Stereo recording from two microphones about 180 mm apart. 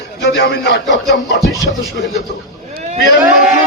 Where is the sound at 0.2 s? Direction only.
75° left (ahead or behind).